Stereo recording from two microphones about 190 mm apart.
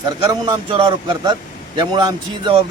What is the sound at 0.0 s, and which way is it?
A man's voice, 20° right (ahead or behind).